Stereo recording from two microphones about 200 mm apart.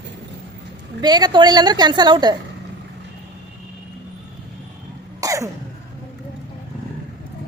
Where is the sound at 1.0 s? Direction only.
20° right (ahead or behind).